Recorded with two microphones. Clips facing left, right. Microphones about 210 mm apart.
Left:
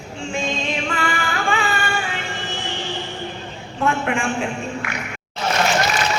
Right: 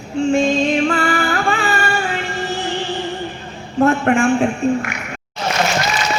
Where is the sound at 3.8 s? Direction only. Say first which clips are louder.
Right 7 dB; 45° right (ahead or behind).